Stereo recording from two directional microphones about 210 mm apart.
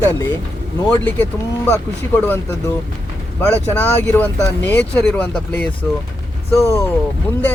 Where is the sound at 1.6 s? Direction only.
10° left (ahead or behind).